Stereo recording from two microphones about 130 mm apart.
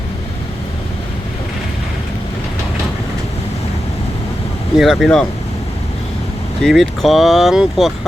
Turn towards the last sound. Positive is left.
turn(degrees=-5)  # may be behind; listen again after turning